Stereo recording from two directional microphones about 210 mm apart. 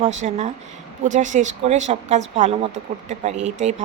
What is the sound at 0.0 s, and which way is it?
Speech, 35° right (ahead or behind).